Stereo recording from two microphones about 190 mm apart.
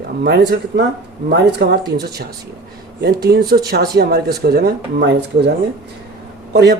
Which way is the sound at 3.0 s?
60° right (ahead or behind).